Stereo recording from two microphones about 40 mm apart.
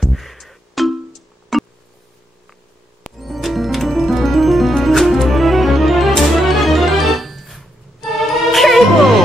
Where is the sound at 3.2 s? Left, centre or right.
Centre.